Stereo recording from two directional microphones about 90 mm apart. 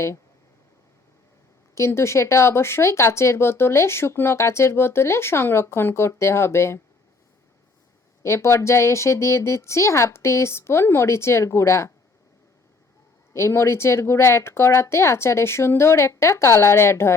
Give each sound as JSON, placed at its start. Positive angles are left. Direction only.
{"t": 1.7, "sound": "speech", "side_deg": 30}
{"t": 8.2, "sound": "speech", "side_deg": 30}
{"t": 13.3, "sound": "speech", "side_deg": 30}